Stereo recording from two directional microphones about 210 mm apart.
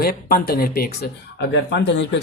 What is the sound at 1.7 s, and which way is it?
Speech, 60° left (ahead or behind).